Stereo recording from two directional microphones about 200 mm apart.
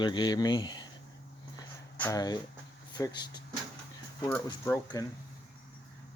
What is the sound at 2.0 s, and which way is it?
Speech, 15° left (ahead or behind).